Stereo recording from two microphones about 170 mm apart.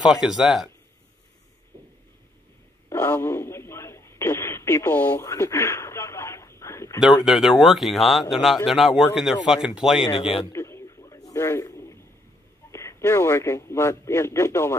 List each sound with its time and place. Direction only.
0.0 s speech: 5° right (ahead or behind)
2.9 s radio: 15° left (ahead or behind)
7.2 s speech: centre (ahead or behind)
10.4 s a sound: 15° left (ahead or behind)
12.7 s a man's voice: 15° left (ahead or behind)